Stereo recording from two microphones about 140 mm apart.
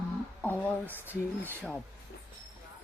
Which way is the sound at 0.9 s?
15° right (ahead or behind).